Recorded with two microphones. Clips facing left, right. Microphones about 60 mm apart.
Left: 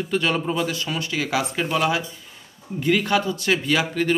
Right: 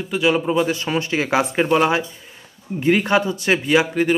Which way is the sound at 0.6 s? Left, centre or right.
Right.